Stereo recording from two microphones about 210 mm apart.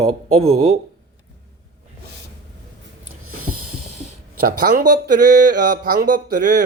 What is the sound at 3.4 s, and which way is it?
Snort, 90° right.